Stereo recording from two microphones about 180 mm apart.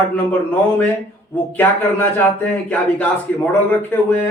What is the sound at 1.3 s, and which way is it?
Speech, 10° left (ahead or behind).